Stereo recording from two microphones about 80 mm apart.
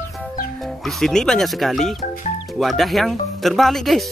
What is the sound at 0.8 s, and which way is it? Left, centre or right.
Speech, centre.